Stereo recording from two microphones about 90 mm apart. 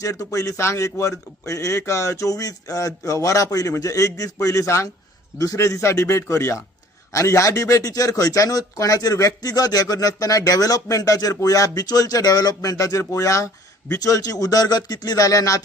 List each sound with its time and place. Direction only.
0.0 s speech: 40° left (ahead or behind)